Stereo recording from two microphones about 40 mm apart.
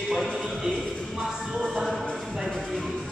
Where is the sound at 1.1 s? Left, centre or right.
Centre.